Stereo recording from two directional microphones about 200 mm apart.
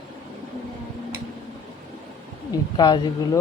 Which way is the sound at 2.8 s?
20° left (ahead or behind).